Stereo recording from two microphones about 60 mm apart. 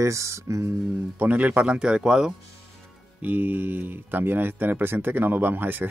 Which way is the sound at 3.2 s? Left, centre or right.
Right.